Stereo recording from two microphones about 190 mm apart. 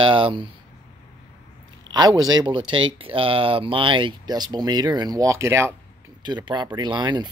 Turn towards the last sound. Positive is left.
turn(degrees=-20)  # may be behind; listen again after turning